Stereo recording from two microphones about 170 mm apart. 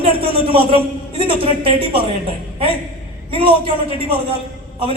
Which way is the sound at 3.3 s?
30° right (ahead or behind).